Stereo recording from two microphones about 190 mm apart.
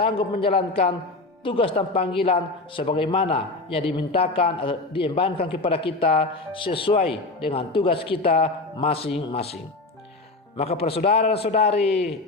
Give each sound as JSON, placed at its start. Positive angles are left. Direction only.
{"t": 0.0, "sound": "a man's voice", "side_deg": 30}
{"t": 10.6, "sound": "a man's voice", "side_deg": 30}